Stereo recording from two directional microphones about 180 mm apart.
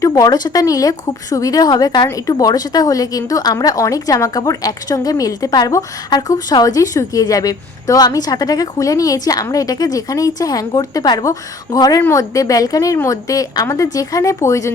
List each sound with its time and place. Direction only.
0.0 s speech: 20° left (ahead or behind)